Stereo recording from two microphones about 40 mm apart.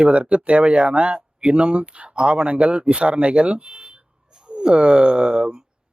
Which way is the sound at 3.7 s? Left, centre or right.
Right.